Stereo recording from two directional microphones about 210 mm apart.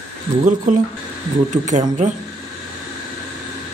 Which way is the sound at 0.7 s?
35° right (ahead or behind).